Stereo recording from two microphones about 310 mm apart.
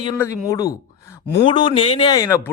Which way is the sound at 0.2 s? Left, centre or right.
Centre.